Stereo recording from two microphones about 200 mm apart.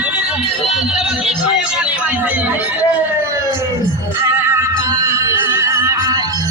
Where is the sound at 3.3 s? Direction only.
15° right (ahead or behind).